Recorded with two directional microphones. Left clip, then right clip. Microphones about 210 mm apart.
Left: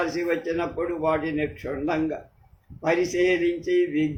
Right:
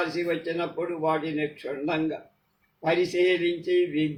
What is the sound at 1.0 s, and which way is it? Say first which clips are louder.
Speech: left 2 dB; 20° left (ahead or behind).